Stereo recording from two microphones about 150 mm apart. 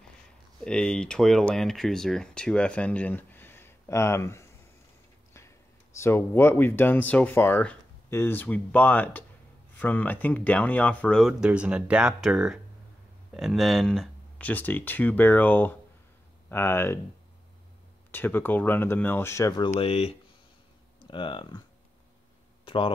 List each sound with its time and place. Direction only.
0.7 s speech: 5° left (ahead or behind)
5.9 s speech: 15° left (ahead or behind)
18.1 s speech: 15° left (ahead or behind)
19.8 s speech: 40° left (ahead or behind)
22.7 s a sound: 35° left (ahead or behind)